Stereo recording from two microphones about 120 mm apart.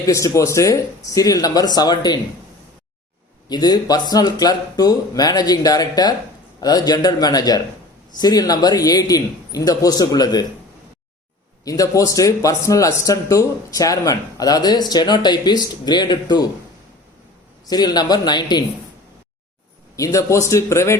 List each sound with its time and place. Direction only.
0.0 s speech: 25° left (ahead or behind)
3.5 s speech: 35° left (ahead or behind)
11.6 s speech: 30° left (ahead or behind)
17.7 s speech: 35° left (ahead or behind)
20.0 s speech: 30° left (ahead or behind)